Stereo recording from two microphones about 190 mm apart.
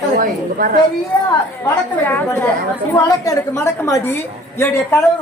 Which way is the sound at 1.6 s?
10° left (ahead or behind).